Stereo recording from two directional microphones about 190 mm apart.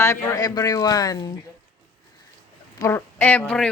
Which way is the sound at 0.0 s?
15° left (ahead or behind).